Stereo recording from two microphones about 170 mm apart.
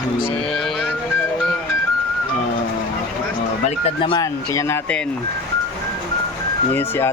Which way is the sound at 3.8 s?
30° left (ahead or behind).